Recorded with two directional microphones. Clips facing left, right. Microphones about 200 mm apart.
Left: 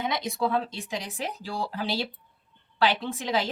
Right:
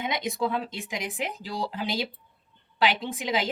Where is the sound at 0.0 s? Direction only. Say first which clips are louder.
Even; 20° right (ahead or behind).